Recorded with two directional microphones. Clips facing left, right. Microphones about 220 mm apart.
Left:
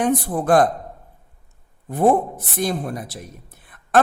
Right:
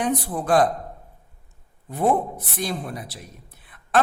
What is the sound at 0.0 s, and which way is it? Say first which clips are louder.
Speech: left 4 dB; 50° left (ahead or behind).